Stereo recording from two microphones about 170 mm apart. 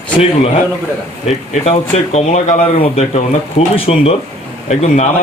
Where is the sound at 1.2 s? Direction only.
40° left (ahead or behind).